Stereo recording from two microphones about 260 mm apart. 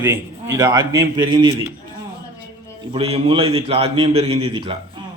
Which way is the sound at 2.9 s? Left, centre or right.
Right.